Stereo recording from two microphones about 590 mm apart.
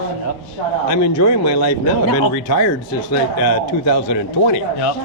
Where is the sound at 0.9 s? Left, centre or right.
Left.